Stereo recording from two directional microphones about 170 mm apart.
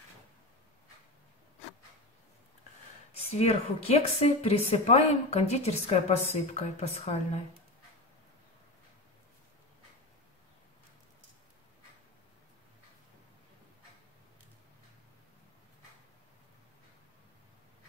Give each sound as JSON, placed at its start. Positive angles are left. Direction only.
{"t": 3.1, "sound": "speech", "side_deg": 35}